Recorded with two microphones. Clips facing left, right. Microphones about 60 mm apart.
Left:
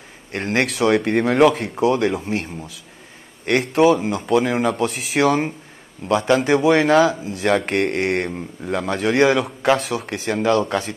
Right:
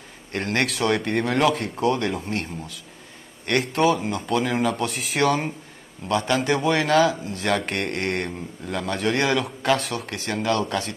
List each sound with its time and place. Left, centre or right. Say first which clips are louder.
0.3 s a man's voice: left 3 dB; centre
8.8 s speech: left 6 dB; centre